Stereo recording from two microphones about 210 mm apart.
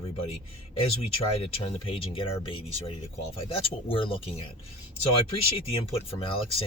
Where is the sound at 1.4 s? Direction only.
25° left (ahead or behind).